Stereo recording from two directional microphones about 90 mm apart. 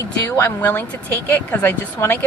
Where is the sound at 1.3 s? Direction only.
20° left (ahead or behind).